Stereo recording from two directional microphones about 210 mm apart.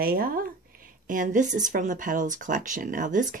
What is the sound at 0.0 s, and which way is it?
Speech, 45° right (ahead or behind).